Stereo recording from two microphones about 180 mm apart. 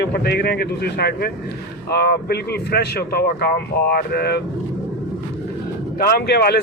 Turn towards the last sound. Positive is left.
turn(degrees=60)  # may be behind; listen again after turning